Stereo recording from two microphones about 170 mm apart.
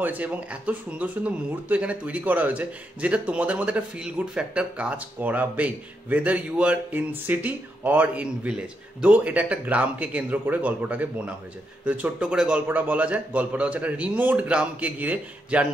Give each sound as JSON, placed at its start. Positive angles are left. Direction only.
{"t": 0.0, "sound": "speech", "side_deg": -10}